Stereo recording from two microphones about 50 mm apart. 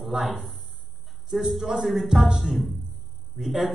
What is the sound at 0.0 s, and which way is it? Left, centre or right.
Speech, centre.